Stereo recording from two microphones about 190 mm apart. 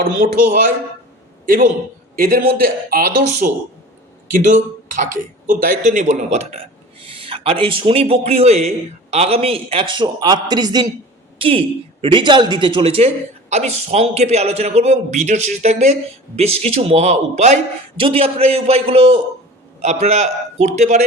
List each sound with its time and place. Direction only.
0.0 s speech: 45° right (ahead or behind)
2.1 s speech: 50° right (ahead or behind)
5.5 s a man's voice: 45° right (ahead or behind)